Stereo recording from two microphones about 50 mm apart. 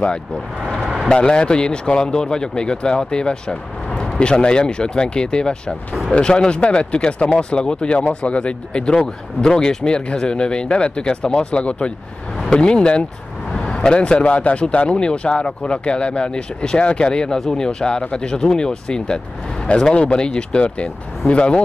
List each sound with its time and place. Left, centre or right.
1.0 s speech: centre